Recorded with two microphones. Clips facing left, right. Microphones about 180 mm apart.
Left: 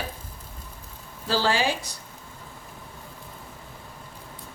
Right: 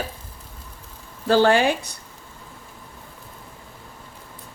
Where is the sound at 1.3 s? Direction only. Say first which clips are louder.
Right 7 dB; 55° right (ahead or behind).